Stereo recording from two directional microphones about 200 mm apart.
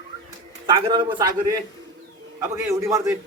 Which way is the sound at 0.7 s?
25° right (ahead or behind).